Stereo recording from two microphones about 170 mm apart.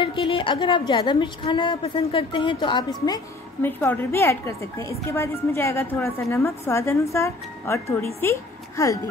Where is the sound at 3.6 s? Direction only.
10° left (ahead or behind).